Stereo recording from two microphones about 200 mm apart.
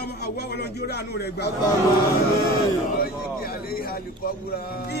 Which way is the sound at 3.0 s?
50° left (ahead or behind).